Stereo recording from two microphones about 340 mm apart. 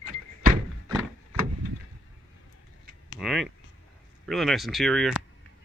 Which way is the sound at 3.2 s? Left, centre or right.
Centre.